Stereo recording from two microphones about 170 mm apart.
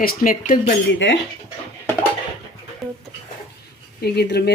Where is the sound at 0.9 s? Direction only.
90° left.